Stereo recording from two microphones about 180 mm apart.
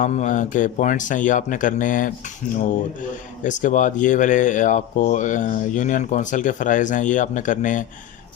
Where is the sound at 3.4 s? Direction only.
45° left (ahead or behind).